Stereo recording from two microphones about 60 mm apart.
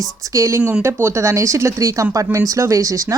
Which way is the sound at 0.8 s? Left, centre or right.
Right.